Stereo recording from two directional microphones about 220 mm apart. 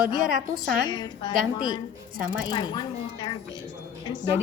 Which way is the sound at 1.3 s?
40° right (ahead or behind).